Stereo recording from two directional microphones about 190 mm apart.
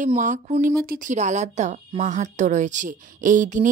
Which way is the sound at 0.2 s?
40° right (ahead or behind).